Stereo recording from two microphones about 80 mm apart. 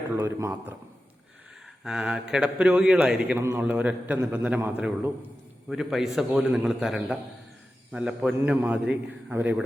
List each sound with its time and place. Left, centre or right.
0.2 s a man's voice: right
1.8 s a man's voice: centre
3.3 s a man's voice: right
3.6 s a man's voice: centre
5.7 s a man's voice: centre
6.3 s a man's voice: centre
7.9 s a man's voice: centre